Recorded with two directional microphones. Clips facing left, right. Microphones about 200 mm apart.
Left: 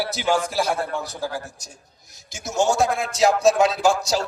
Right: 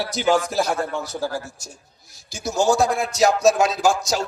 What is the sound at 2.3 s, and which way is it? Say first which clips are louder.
Speech: right 2 dB; 20° left (ahead or behind).